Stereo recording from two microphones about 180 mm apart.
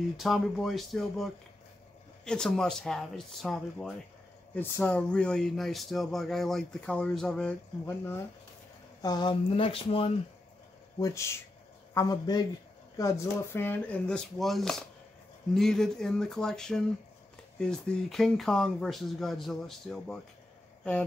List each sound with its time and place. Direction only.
0.2 s speech: centre (ahead or behind)
9.0 s speech: 25° left (ahead or behind)
11.0 s speech: 15° left (ahead or behind); by 20.2 s centre (ahead or behind)